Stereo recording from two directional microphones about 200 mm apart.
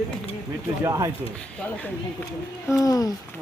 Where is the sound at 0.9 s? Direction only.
15° right (ahead or behind).